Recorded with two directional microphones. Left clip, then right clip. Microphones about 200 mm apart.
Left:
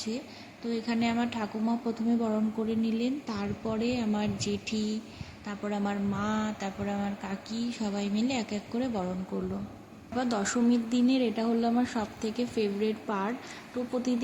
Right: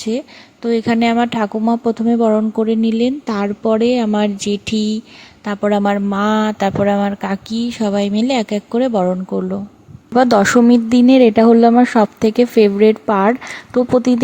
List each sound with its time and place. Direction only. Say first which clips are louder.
0.6 s speech: right 16 dB; 45° right (ahead or behind)